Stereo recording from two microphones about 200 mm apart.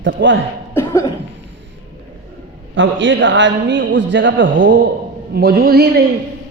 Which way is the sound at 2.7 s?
70° right (ahead or behind).